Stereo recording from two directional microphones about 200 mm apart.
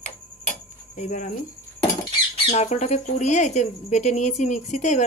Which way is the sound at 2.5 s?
35° left (ahead or behind).